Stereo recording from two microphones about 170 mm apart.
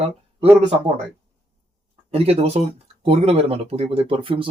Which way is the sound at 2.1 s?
35° right (ahead or behind).